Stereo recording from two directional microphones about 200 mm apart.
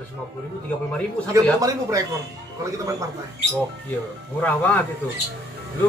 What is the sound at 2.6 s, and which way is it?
Speech, 15° right (ahead or behind).